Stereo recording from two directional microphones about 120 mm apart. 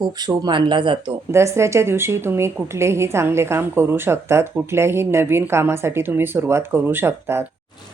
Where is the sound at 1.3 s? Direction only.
25° right (ahead or behind).